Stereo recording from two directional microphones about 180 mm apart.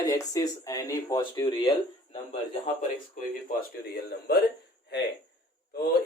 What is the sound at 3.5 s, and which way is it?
Speech, 60° left (ahead or behind).